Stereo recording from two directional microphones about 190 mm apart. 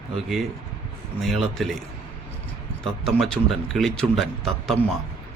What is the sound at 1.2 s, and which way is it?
Speech, centre (ahead or behind).